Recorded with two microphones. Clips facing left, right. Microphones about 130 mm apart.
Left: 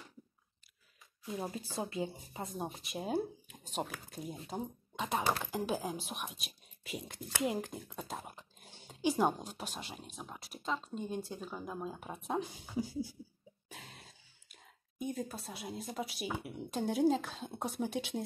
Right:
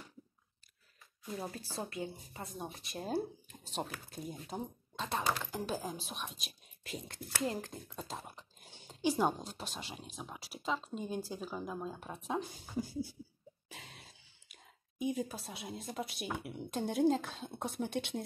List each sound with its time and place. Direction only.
1.2 s speech: 10° left (ahead or behind)
1.8 s speech: 20° left (ahead or behind)
3.0 s speech: 10° left (ahead or behind)
4.9 s speech: 10° left (ahead or behind)